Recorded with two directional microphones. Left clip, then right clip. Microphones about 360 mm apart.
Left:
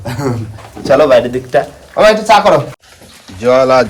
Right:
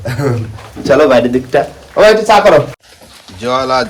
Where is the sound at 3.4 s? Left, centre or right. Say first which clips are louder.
Left 5 dB; centre.